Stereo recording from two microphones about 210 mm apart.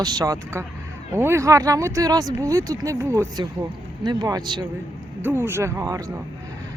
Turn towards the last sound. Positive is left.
turn(degrees=-15)  # may be behind; listen again after turning